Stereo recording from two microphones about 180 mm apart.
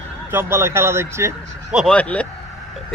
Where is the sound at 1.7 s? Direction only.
5° left (ahead or behind).